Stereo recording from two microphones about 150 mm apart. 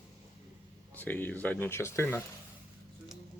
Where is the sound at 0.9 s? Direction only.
10° left (ahead or behind).